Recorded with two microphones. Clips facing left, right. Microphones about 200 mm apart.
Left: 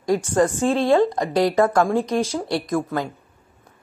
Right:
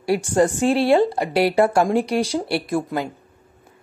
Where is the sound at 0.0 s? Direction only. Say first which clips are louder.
Right 1 dB; 15° right (ahead or behind).